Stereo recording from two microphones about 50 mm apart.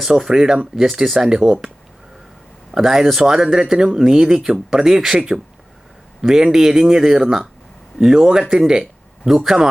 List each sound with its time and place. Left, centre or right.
0.0 s speech: centre
2.7 s speech: centre